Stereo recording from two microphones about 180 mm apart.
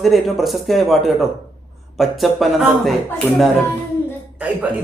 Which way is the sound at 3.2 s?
10° left (ahead or behind).